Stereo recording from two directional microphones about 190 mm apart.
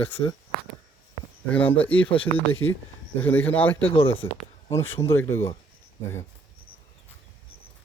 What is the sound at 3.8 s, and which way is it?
Speech, 30° left (ahead or behind).